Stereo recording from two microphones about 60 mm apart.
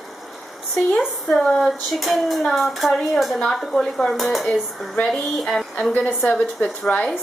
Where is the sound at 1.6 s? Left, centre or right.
Centre.